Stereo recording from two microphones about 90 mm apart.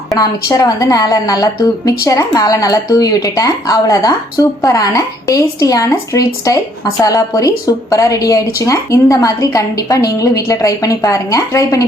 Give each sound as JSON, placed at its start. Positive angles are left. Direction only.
{"t": 0.2, "sound": "a woman's voice", "side_deg": 45}